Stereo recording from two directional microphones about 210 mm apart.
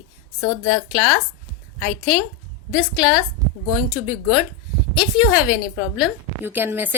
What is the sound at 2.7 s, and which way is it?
Speech, 5° right (ahead or behind).